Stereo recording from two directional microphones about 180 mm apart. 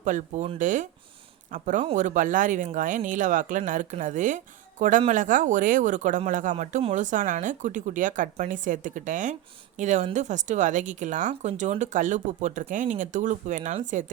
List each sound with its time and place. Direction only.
0.0 s speech: 45° right (ahead or behind)